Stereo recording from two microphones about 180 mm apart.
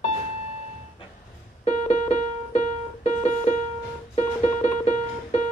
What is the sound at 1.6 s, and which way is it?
Music, 35° left (ahead or behind).